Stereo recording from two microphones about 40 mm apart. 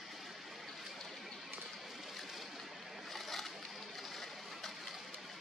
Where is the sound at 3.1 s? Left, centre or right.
Centre.